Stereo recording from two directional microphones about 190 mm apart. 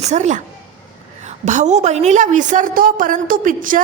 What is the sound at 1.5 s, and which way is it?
A woman's voice, 40° right (ahead or behind).